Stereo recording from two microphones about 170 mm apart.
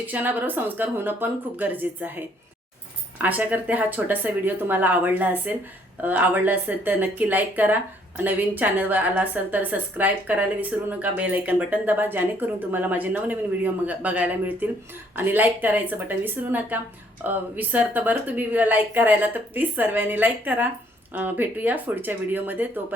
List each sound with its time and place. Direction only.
0.0 s a woman's voice: 10° right (ahead or behind)